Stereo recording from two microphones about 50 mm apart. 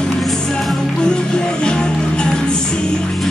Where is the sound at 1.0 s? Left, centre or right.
Centre.